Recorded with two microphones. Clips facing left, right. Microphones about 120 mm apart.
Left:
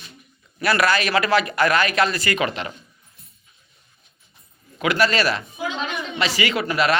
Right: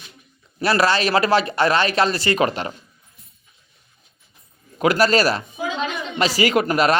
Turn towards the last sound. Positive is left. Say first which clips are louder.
# right 3 dB
turn(degrees=-40)  # may be behind; listen again after turning